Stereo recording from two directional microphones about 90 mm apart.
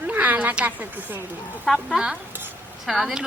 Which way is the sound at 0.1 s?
15° right (ahead or behind).